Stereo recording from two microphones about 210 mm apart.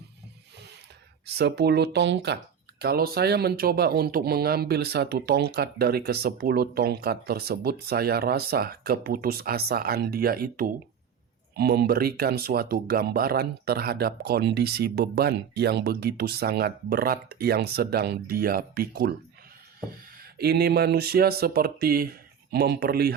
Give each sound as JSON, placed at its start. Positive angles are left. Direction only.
{"t": 1.4, "sound": "speech", "side_deg": -50}
{"t": 20.4, "sound": "speech", "side_deg": -50}